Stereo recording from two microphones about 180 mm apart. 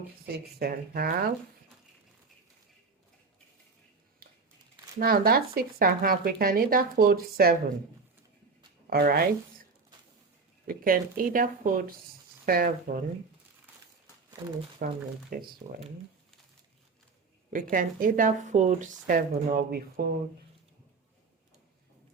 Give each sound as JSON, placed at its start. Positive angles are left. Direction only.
{"t": 0.3, "sound": "speech", "side_deg": -60}
{"t": 4.2, "sound": "a sound", "side_deg": -55}
{"t": 4.9, "sound": "speech", "side_deg": -55}
{"t": 8.9, "sound": "speech", "side_deg": -55}
{"t": 10.7, "sound": "speech", "side_deg": -50}
{"t": 14.8, "sound": "speech", "side_deg": -50}
{"t": 17.5, "sound": "speech", "side_deg": -50}